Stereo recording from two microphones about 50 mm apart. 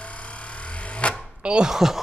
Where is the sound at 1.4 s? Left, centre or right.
Right.